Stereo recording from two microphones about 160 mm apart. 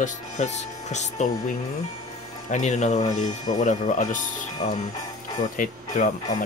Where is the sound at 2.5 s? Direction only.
45° left (ahead or behind).